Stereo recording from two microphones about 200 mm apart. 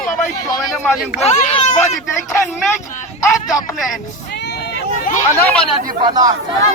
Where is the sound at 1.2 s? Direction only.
30° left (ahead or behind).